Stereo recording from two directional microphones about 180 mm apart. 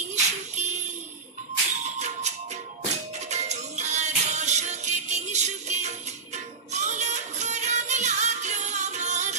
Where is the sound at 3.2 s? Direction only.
40° right (ahead or behind).